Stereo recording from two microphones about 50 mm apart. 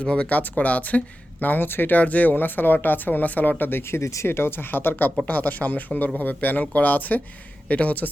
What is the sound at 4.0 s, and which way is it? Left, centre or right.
Speech, left.